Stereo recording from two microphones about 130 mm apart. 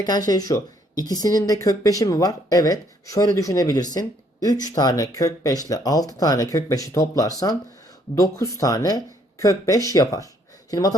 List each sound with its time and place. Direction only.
0.0 s speech: 30° left (ahead or behind)